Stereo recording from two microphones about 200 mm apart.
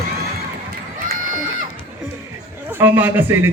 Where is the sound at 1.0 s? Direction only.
40° right (ahead or behind).